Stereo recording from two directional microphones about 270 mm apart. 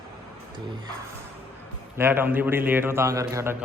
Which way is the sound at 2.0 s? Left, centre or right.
Centre.